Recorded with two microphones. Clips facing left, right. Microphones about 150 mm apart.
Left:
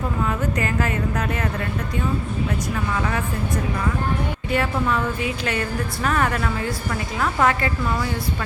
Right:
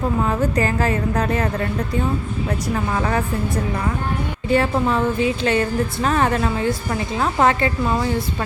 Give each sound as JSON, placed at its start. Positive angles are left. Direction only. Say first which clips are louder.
{"t": 0.3, "sound": "a woman's voice", "louder": "right 4 dB", "side_deg": -35}
{"t": 2.7, "sound": "a woman's voice", "louder": "right 6 dB", "side_deg": -35}
{"t": 4.5, "sound": "a woman's voice", "louder": "right 4 dB", "side_deg": -30}